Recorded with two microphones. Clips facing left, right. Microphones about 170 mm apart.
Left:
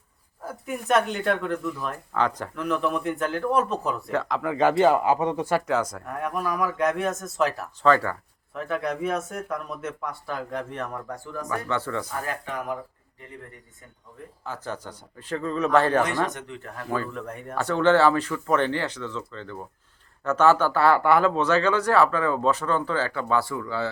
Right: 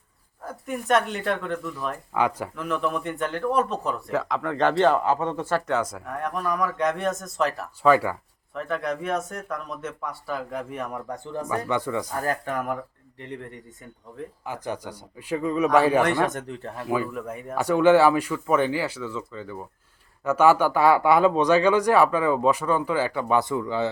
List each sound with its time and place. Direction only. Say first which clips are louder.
0.4 s speech: right 1 dB; 5° left (ahead or behind)
2.1 s speech: right 1 dB; 10° right (ahead or behind)
2.6 s speech: left 2 dB; centre (ahead or behind)
5.6 s speech: even; centre (ahead or behind)
7.8 s speech: right 1 dB; 10° right (ahead or behind)
8.5 s speech: even; centre (ahead or behind)
11.1 s speech: right 2 dB; 20° right (ahead or behind)
12.2 s speech: right 4 dB; 45° right (ahead or behind)
14.4 s speech: right 1 dB; 15° right (ahead or behind)
16.2 s speech: right 3 dB; 45° right (ahead or behind)
16.8 s speech: right 3 dB; 10° right (ahead or behind)